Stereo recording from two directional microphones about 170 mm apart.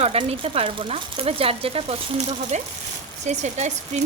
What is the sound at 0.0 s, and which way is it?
Speech, 35° right (ahead or behind).